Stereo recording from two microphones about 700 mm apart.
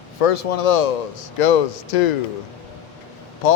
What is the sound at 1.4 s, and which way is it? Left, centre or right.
Speech, left.